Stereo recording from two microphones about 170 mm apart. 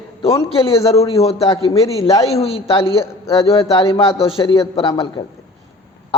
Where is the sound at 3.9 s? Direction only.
30° left (ahead or behind).